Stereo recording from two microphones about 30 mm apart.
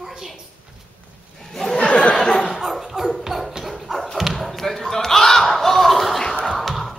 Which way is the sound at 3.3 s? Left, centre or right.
Centre.